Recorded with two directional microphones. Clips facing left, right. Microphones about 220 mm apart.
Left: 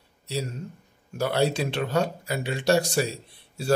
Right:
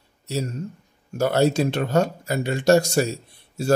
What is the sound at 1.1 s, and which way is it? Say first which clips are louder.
Speech: right 5 dB; 45° right (ahead or behind).